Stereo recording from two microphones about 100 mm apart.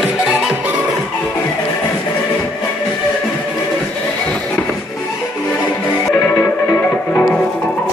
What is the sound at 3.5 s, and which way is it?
Music, 10° left (ahead or behind).